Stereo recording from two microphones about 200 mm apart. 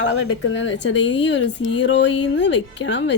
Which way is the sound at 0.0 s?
65° left (ahead or behind).